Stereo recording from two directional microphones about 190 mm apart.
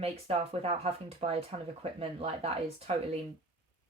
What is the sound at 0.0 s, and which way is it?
Speech, 30° right (ahead or behind).